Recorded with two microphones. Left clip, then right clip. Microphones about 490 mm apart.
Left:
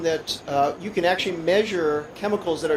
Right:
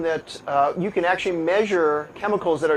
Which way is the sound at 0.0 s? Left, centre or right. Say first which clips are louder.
Even; right.